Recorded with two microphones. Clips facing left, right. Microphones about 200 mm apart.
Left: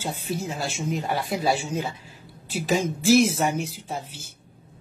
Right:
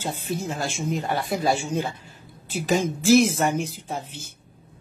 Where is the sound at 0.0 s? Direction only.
5° left (ahead or behind).